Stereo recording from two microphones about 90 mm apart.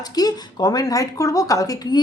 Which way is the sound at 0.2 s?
45° left (ahead or behind).